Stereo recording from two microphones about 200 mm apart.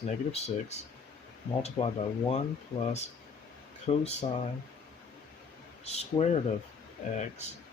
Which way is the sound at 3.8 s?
30° left (ahead or behind).